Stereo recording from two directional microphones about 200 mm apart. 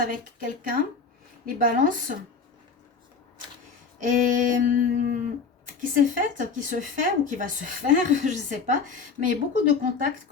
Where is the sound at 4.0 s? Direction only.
40° right (ahead or behind).